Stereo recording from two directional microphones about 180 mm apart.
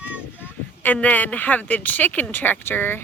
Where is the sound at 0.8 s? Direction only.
10° left (ahead or behind).